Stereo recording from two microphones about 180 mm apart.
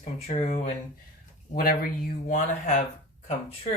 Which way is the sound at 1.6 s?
50° left (ahead or behind).